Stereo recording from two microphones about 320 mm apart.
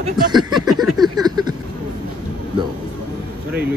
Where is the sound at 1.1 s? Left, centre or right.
Centre.